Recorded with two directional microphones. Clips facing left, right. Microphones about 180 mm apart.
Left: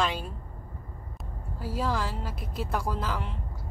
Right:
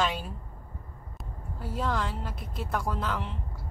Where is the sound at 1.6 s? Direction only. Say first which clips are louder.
Left 1 dB; centre (ahead or behind).